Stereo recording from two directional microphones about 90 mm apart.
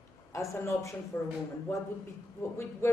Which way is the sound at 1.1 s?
20° left (ahead or behind).